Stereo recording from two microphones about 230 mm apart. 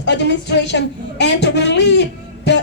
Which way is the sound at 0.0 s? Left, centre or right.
Left.